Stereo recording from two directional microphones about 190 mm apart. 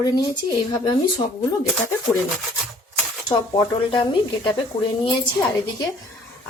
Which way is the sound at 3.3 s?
25° left (ahead or behind).